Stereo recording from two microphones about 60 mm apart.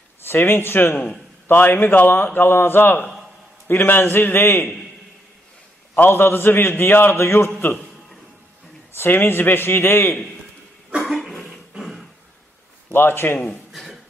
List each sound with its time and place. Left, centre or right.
0.2 s a man's voice: left
5.9 s a man's voice: left
8.9 s a man's voice: left
11.0 s cough: centre
11.7 s a sound: centre
12.9 s a man's voice: left
13.7 s a sound: centre